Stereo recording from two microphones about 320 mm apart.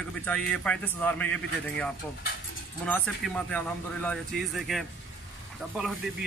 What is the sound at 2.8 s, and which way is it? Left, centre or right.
Speech, centre.